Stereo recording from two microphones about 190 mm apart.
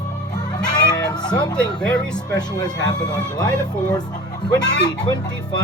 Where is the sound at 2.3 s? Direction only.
20° left (ahead or behind).